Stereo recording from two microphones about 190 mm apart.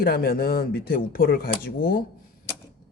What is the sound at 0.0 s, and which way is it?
Speech, 55° left (ahead or behind).